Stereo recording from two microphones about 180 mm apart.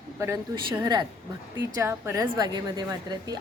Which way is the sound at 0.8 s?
25° right (ahead or behind).